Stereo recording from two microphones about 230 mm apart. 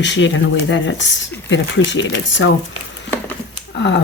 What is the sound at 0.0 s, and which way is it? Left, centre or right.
Speech, left.